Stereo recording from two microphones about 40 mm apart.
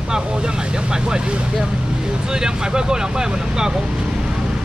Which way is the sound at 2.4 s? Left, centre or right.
Centre.